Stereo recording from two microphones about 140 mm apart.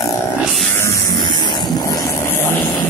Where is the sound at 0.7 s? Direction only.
20° left (ahead or behind).